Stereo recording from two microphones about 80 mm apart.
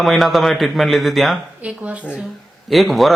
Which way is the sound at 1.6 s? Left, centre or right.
Centre.